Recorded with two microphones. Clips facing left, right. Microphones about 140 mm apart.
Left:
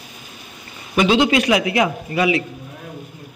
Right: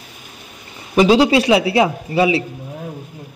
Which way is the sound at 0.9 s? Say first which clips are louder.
Right 4 dB; 35° right (ahead or behind).